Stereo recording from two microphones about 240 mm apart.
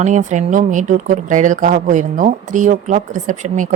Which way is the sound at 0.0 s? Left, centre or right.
Right.